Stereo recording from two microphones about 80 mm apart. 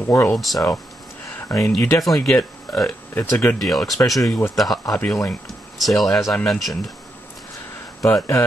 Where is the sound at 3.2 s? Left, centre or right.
Left.